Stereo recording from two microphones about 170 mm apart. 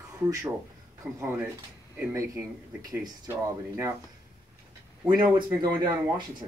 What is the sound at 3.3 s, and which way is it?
Speech, 15° right (ahead or behind).